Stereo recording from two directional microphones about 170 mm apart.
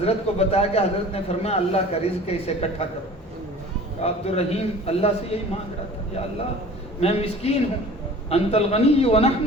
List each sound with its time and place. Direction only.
0.0 s a man's voice: 35° left (ahead or behind)
4.0 s a man's voice: 35° left (ahead or behind)
7.0 s a man's voice: 35° left (ahead or behind)